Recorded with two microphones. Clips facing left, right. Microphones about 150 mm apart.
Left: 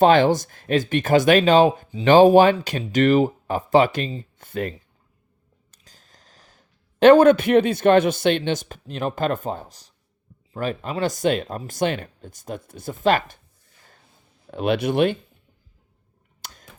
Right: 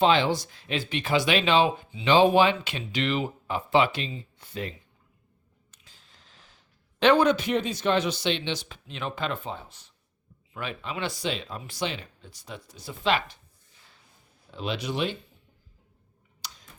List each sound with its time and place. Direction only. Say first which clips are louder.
0.0 s speech: left 7 dB; 50° left (ahead or behind)
5.7 s speech: left 4 dB; 40° left (ahead or behind)
14.5 s speech: left 10 dB; 60° left (ahead or behind)
16.4 s a sound: left 2 dB; 50° left (ahead or behind)